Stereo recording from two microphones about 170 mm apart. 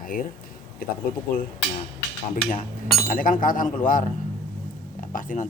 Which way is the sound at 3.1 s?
55° left (ahead or behind).